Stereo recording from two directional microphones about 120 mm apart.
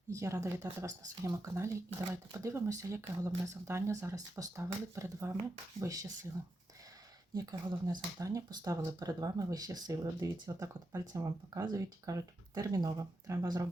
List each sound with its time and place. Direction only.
0.1 s speech: 25° right (ahead or behind)
7.3 s speech: 30° right (ahead or behind)